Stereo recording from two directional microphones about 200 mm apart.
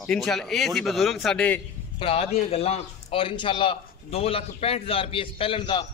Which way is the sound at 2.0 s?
30° left (ahead or behind).